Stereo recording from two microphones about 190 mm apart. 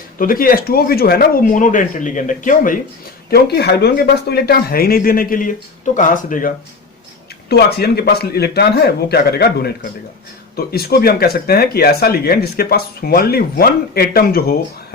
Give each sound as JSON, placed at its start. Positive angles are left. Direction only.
{"t": 0.2, "sound": "speech", "side_deg": 50}
{"t": 3.2, "sound": "speech", "side_deg": 55}
{"t": 7.5, "sound": "a man's voice", "side_deg": 60}